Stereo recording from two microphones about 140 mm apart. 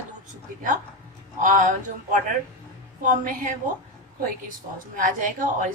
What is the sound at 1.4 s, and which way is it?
A woman's voice, 65° right (ahead or behind).